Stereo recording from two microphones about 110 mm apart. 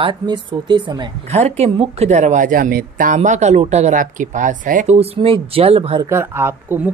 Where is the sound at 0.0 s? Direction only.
45° right (ahead or behind).